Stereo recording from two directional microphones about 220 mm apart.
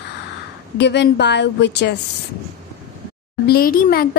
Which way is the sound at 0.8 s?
50° left (ahead or behind).